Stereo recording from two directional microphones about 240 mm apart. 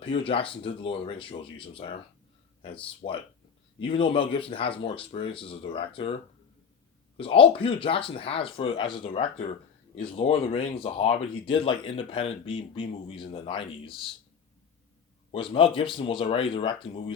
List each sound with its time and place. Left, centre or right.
0.0 s speech: left
7.2 s speech: left
15.3 s speech: left